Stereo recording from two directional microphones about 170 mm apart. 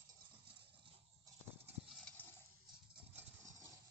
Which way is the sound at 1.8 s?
Centre (ahead or behind).